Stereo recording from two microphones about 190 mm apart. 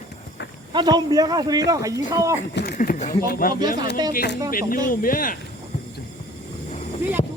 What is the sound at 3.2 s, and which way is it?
Speech, 50° left (ahead or behind).